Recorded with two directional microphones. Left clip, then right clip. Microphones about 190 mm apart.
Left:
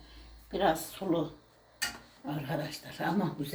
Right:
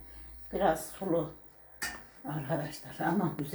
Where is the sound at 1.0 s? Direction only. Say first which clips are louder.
Even; centre (ahead or behind).